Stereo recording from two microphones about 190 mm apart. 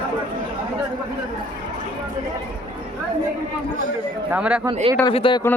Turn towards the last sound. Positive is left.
turn(degrees=25)  # may be behind; listen again after turning